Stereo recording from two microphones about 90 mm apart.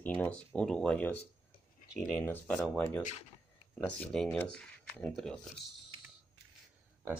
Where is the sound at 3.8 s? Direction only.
15° left (ahead or behind).